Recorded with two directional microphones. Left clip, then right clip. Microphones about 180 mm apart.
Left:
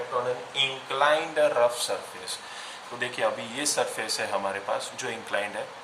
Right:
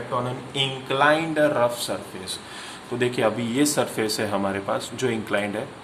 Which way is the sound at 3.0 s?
30° right (ahead or behind).